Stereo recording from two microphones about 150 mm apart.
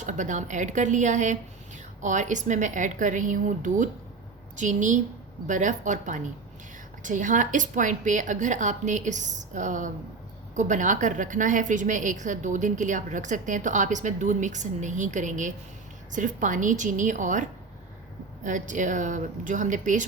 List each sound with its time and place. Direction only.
0.0 s a woman's voice: 55° right (ahead or behind)
18.4 s a woman's voice: 55° right (ahead or behind)